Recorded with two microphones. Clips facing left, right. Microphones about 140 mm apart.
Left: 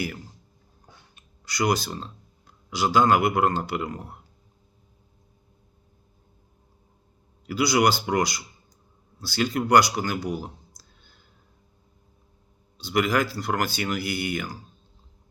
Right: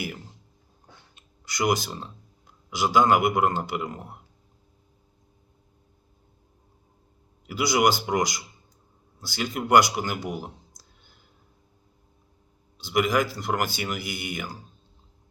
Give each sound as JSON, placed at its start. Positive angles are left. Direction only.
{"t": 1.5, "sound": "speech", "side_deg": -15}
{"t": 7.5, "sound": "speech", "side_deg": -20}
{"t": 10.0, "sound": "a sound", "side_deg": -20}
{"t": 12.8, "sound": "speech", "side_deg": -15}